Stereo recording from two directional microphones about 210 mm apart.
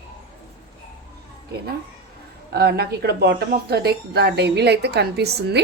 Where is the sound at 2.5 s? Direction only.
50° right (ahead or behind).